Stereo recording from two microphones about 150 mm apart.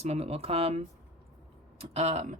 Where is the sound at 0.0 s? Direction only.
45° right (ahead or behind).